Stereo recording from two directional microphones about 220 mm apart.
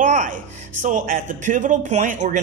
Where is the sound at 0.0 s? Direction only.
35° right (ahead or behind).